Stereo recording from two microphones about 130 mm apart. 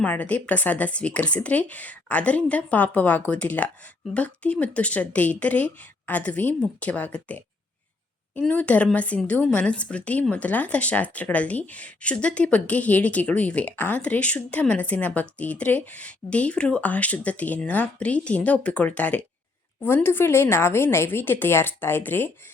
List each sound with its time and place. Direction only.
0.0 s a woman's voice: 10° left (ahead or behind)